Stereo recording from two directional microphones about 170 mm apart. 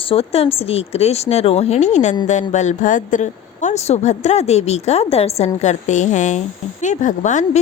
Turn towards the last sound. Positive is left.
turn(degrees=45)  # may be behind; listen again after turning